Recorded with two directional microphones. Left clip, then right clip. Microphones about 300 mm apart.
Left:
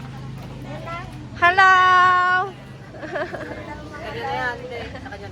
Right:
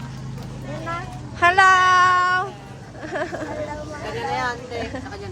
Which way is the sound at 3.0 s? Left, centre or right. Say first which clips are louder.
Right 1 dB; centre.